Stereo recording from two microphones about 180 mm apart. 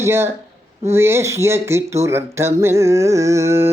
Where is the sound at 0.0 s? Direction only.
15° right (ahead or behind).